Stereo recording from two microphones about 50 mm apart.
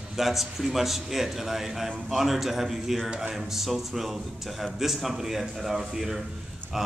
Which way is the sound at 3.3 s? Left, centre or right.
Centre.